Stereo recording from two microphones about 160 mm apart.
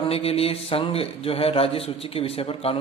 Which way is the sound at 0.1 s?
40° left (ahead or behind).